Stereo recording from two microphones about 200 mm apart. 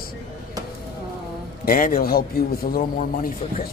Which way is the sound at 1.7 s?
45° left (ahead or behind).